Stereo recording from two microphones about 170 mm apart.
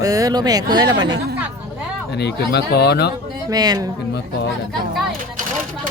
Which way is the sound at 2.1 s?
75° left (ahead or behind).